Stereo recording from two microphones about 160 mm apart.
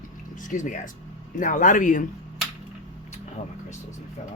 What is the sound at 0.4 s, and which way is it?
Speech, 55° left (ahead or behind).